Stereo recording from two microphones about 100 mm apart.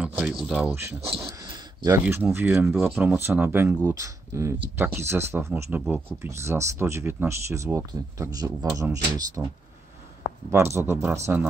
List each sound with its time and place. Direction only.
0.0 s a sound: 15° right (ahead or behind)
0.4 s speech: 10° right (ahead or behind)
0.7 s speech: 25° right (ahead or behind)
1.4 s a sound: 30° right (ahead or behind)
2.3 s speech: 15° right (ahead or behind)
3.9 s speech: 30° right (ahead or behind)
4.6 s speech: 20° right (ahead or behind); by 9.4 s 35° right (ahead or behind)
10.5 s speech: 25° right (ahead or behind)